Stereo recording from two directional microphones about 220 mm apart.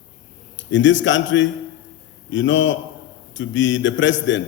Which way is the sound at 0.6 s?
55° left (ahead or behind).